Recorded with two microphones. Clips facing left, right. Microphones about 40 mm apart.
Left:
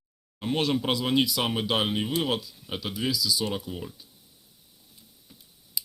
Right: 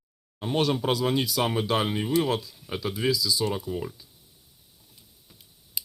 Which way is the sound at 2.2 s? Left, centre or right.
Right.